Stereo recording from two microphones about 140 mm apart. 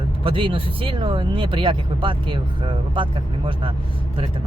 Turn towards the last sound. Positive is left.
turn(degrees=-35)  # may be behind; listen again after turning